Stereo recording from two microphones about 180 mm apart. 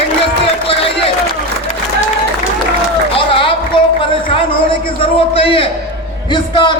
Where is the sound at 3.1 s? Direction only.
30° left (ahead or behind).